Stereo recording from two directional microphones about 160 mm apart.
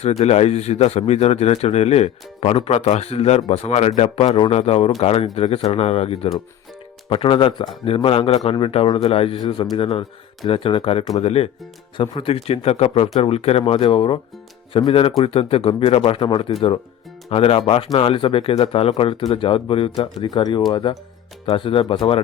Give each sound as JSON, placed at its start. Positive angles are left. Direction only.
{"t": 0.0, "sound": "a man's voice", "side_deg": 40}